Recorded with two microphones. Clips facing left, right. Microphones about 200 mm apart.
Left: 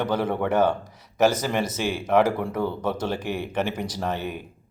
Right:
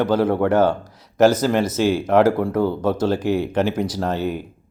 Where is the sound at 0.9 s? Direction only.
10° left (ahead or behind).